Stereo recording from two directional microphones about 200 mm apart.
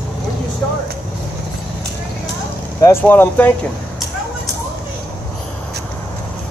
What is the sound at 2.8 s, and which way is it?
Speech, 15° left (ahead or behind).